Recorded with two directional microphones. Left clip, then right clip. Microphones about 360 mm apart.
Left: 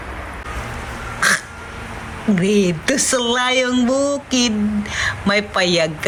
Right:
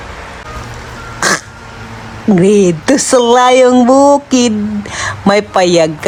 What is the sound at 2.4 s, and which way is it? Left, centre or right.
Speech, centre.